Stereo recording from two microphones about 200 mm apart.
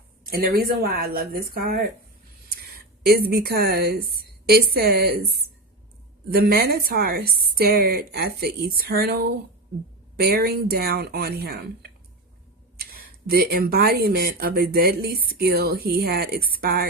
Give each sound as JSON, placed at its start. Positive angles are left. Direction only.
{"t": 0.3, "sound": "speech", "side_deg": -45}
{"t": 3.1, "sound": "speech", "side_deg": -50}
{"t": 6.3, "sound": "speech", "side_deg": -50}